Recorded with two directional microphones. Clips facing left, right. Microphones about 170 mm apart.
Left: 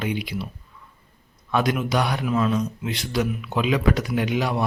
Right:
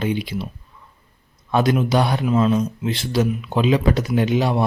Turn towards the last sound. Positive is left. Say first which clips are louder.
# right 4 dB
turn(degrees=-30)  # may be behind; listen again after turning